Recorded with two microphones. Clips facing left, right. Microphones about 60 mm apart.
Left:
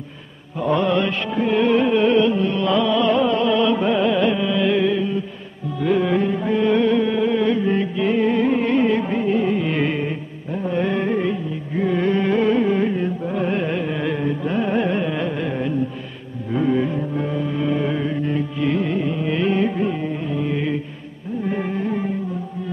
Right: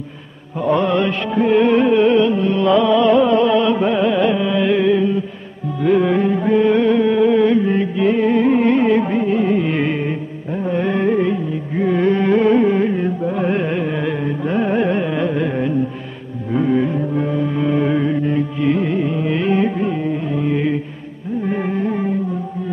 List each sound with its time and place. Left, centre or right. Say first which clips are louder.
0.7 s music: right 2 dB; centre
3.7 s music: right 2 dB; centre
7.6 s music: right 3 dB; centre
11.8 s carnatic music: right 3 dB; centre
12.9 s carnatic music: right 3 dB; right
16.5 s music: right 3 dB; centre
18.6 s carnatic music: right 3 dB; centre
19.1 s music: right 1 dB; right